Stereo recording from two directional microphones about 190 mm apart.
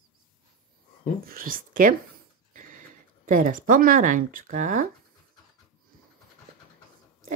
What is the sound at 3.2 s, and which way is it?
Speech, 45° right (ahead or behind).